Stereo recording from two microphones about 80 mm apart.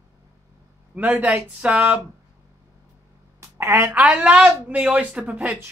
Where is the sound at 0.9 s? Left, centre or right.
Centre.